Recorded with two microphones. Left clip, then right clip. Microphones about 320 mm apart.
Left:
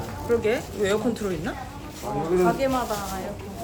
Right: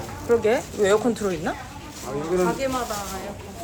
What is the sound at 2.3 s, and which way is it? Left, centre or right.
Speech, centre.